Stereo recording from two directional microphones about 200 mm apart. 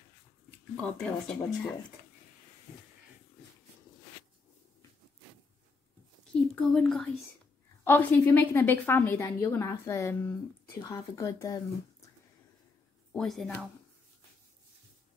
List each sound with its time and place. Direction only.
0.8 s speech: 5° left (ahead or behind)
6.5 s a woman's voice: 5° left (ahead or behind)
13.1 s speech: centre (ahead or behind)